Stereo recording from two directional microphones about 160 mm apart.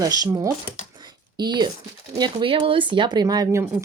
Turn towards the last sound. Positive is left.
turn(degrees=-20)  # may be behind; listen again after turning